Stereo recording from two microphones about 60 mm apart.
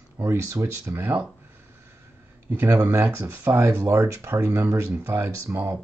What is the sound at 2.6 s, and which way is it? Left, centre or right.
Speech, right.